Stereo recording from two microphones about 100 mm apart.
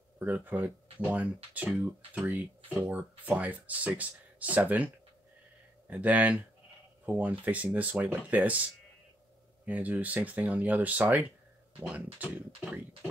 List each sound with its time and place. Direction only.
0.2 s speech: 15° right (ahead or behind)
9.7 s speech: 15° right (ahead or behind)